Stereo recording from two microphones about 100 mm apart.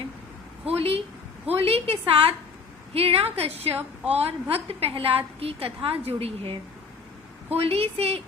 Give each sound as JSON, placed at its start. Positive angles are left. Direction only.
{"t": 0.6, "sound": "a woman's voice", "side_deg": -80}
{"t": 4.1, "sound": "a woman's voice", "side_deg": -80}